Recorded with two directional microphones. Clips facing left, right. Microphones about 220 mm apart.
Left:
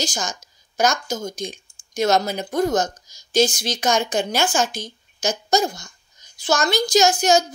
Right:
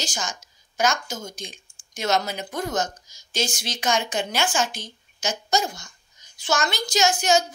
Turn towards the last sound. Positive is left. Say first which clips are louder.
# left 4 dB
turn(degrees=35)  # may be behind; listen again after turning